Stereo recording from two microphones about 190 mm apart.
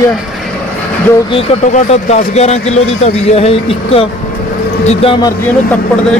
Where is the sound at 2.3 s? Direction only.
35° left (ahead or behind).